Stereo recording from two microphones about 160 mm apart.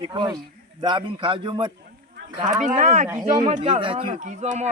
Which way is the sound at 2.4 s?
50° right (ahead or behind).